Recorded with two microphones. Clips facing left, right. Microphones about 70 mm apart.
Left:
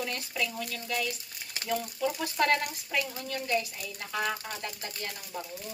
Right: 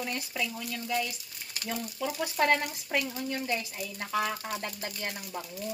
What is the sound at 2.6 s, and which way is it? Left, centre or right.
Speech, right.